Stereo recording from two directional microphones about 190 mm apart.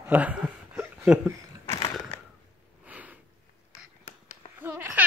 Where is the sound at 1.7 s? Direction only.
30° left (ahead or behind).